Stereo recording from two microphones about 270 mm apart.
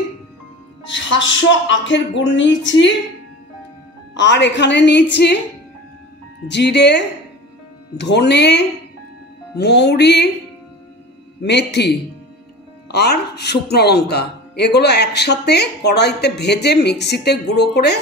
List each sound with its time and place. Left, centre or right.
0.8 s speech: left
4.1 s a man's voice: left
6.4 s a man's voice: left
11.4 s a man's voice: left